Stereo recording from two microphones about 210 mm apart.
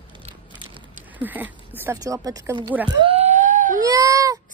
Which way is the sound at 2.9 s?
25° right (ahead or behind).